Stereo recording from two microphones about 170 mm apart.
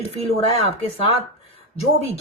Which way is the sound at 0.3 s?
35° left (ahead or behind).